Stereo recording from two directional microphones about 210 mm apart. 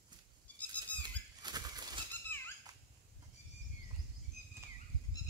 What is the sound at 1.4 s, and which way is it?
Bird flight, 20° right (ahead or behind).